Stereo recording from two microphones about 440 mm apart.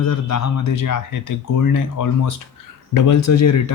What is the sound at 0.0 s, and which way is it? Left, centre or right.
Speech, left.